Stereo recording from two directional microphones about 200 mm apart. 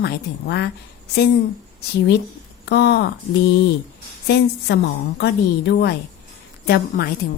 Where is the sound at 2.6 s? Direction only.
60° left (ahead or behind).